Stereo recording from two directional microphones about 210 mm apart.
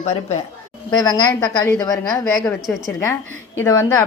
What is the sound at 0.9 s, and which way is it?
Speech, 20° left (ahead or behind).